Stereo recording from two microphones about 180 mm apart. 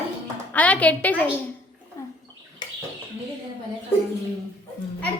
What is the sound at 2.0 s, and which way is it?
Bathtub, 15° left (ahead or behind).